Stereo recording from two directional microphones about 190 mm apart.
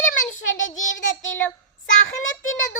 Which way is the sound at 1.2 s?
90° left.